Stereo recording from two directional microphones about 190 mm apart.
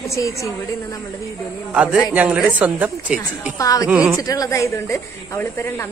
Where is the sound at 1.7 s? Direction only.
5° right (ahead or behind).